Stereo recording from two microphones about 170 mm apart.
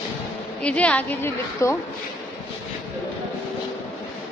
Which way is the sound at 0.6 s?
5° left (ahead or behind).